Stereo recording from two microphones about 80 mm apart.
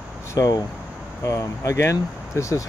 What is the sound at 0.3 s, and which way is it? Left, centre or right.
Speech, left.